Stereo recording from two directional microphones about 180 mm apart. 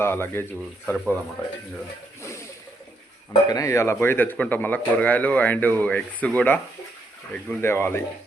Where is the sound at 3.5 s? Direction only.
20° left (ahead or behind).